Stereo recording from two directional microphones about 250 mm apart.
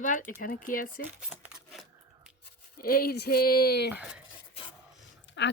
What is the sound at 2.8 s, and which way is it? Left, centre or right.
Speech, left.